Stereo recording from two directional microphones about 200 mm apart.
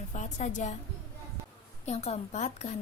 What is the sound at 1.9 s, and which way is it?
Speech, 35° left (ahead or behind).